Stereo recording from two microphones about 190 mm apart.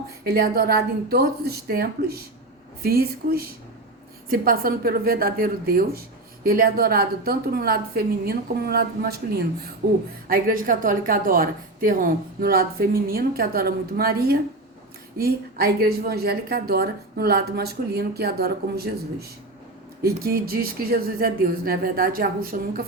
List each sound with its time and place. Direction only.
0.3 s a woman's voice: 55° right (ahead or behind)
10.2 s a woman's voice: 50° right (ahead or behind)
20.0 s speech: 55° right (ahead or behind)